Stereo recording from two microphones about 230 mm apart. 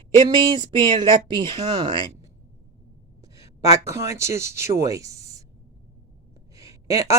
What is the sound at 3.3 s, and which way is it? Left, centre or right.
Speech, centre.